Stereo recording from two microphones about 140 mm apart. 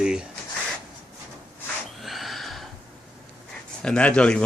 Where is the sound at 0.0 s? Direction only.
5° right (ahead or behind).